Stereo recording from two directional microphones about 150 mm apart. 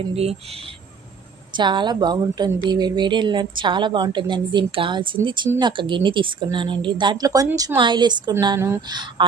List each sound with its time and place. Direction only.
0.1 s a woman's voice: 40° right (ahead or behind)
1.5 s a woman's voice: 30° right (ahead or behind)